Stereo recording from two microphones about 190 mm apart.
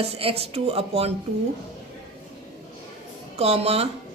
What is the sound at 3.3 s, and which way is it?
Speech, 35° right (ahead or behind).